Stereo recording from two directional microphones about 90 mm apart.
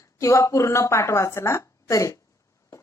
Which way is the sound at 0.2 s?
35° left (ahead or behind).